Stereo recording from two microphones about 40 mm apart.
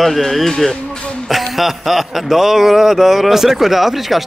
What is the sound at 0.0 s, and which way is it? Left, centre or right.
A man's voice, centre.